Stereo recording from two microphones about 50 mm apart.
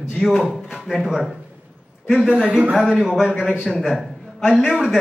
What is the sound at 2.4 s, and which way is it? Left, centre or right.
Speech, right.